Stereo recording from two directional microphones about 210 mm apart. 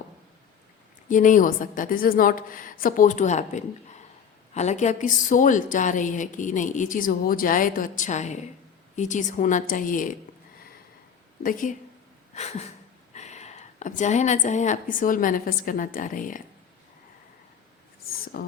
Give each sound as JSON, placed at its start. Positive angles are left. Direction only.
{"t": 1.1, "sound": "a woman's voice", "side_deg": 40}
{"t": 11.4, "sound": "a woman's voice", "side_deg": 40}
{"t": 12.3, "sound": "a sound", "side_deg": 30}
{"t": 13.1, "sound": "a woman's voice", "side_deg": 35}
{"t": 18.3, "sound": "speech", "side_deg": 45}